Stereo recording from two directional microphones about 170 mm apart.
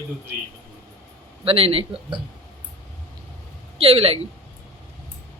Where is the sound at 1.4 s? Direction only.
35° right (ahead or behind).